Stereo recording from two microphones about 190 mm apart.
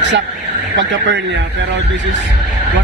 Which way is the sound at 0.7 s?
70° right (ahead or behind).